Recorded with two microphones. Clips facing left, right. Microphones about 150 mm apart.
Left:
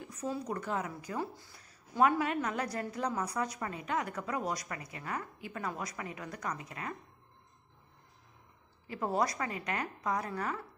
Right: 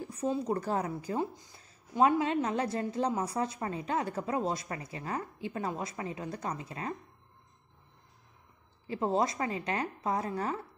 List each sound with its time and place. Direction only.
0.0 s a woman's voice: 30° right (ahead or behind)
1.2 s a woman's voice: 20° right (ahead or behind)
8.8 s a woman's voice: 25° right (ahead or behind)